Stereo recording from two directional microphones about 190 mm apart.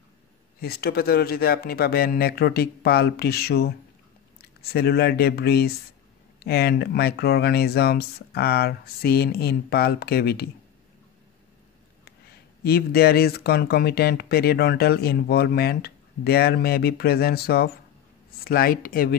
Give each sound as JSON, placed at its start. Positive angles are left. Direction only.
{"t": 0.6, "sound": "speech", "side_deg": 55}
{"t": 12.6, "sound": "speech", "side_deg": 55}